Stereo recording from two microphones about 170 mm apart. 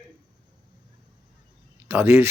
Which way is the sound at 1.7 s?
15° right (ahead or behind).